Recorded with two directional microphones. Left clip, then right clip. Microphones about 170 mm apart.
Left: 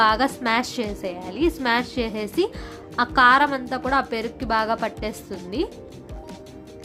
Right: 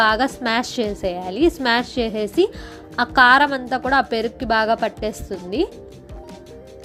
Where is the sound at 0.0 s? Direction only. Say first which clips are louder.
Right 2 dB; 15° right (ahead or behind).